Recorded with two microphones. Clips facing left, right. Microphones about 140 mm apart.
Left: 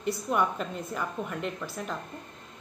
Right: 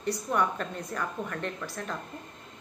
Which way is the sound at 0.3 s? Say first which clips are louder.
Left 1 dB; 15° left (ahead or behind).